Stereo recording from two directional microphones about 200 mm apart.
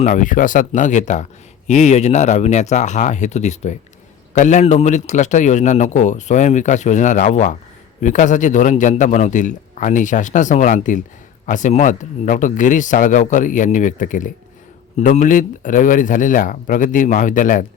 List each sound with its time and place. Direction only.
0.0 s a man's voice: 40° left (ahead or behind)